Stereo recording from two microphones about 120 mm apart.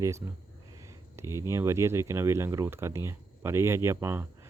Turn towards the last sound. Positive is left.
turn(degrees=-20)  # may be behind; listen again after turning